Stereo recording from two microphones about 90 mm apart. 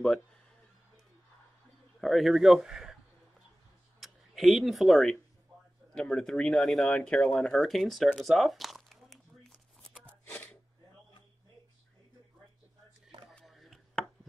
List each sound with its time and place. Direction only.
2.0 s a man's voice: centre (ahead or behind)
4.0 s speech: centre (ahead or behind)
6.9 s speech: 15° left (ahead or behind)
8.2 s a sound: centre (ahead or behind)
10.0 s shuffling cards: 20° left (ahead or behind)
13.5 s a sound: centre (ahead or behind)